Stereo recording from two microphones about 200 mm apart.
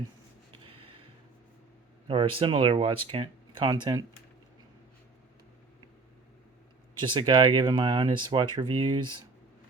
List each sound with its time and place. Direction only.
0.6 s gasp: 25° right (ahead or behind)
2.0 s speech: 25° right (ahead or behind)
7.0 s speech: 25° right (ahead or behind)